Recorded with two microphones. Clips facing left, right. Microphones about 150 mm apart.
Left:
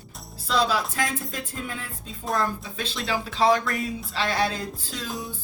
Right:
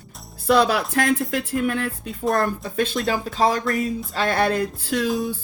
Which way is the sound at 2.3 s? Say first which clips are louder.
Right 3 dB; 50° right (ahead or behind).